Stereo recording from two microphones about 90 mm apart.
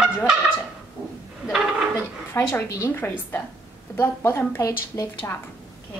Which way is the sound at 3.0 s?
20° left (ahead or behind).